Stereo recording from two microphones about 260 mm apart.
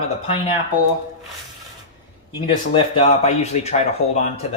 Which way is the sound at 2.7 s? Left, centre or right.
Left.